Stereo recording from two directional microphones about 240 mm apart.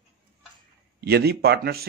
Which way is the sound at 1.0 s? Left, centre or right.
Right.